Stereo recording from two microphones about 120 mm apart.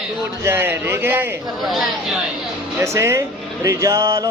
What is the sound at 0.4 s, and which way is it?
Speech, 20° right (ahead or behind).